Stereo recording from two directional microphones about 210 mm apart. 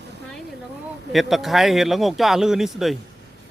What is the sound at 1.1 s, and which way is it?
Speech, centre (ahead or behind).